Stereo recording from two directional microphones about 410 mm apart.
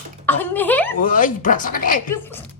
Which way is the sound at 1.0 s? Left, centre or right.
Centre.